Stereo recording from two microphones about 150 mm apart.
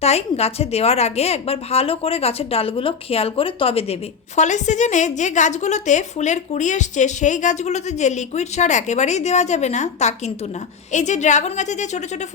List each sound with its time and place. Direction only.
0.0 s a woman's voice: 45° left (ahead or behind)
4.4 s a woman's voice: 55° left (ahead or behind)